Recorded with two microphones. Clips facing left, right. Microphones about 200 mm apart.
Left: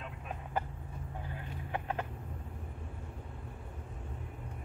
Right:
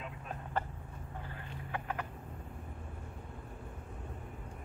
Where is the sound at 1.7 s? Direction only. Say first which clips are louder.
Left 2 dB; 25° left (ahead or behind).